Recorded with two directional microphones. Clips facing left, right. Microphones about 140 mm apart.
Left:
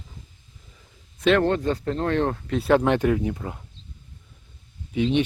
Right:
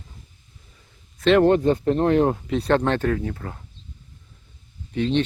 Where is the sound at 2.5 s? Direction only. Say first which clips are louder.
Left 1 dB; 5° left (ahead or behind).